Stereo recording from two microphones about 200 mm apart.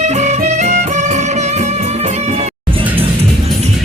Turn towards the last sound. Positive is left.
turn(degrees=-35)  # may be behind; listen again after turning